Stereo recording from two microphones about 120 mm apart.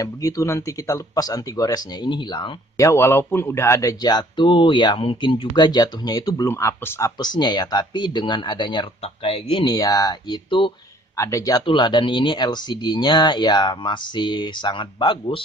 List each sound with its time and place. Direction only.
0.0 s speech: 30° left (ahead or behind)
2.8 s speech: 20° left (ahead or behind)
4.0 s speech: 35° left (ahead or behind)
6.5 s speech: 20° left (ahead or behind)
7.2 s speech: 35° left (ahead or behind)
9.7 s speech: 30° left (ahead or behind)
11.1 s speech: 25° left (ahead or behind)
11.6 s speech: 40° left (ahead or behind)